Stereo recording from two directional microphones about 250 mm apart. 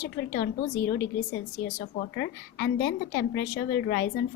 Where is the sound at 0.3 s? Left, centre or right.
Left.